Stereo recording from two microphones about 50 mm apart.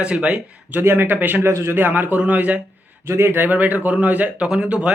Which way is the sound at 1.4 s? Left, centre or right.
Right.